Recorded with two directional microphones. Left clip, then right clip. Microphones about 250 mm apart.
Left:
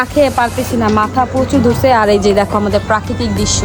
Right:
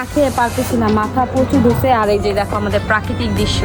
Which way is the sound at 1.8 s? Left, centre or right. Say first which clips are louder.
Left 4 dB; left.